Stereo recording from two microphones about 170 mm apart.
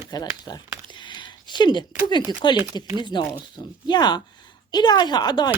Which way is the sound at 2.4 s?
25° left (ahead or behind).